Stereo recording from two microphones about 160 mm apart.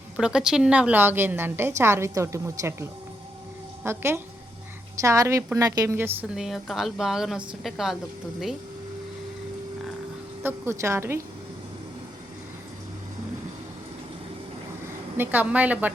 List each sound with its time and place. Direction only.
0.2 s a woman's voice: 5° right (ahead or behind)
3.8 s a woman's voice: 15° right (ahead or behind)
6.2 s a woman's voice: 5° right (ahead or behind)
10.4 s a woman's voice: 15° right (ahead or behind)
15.2 s a woman's voice: 10° right (ahead or behind)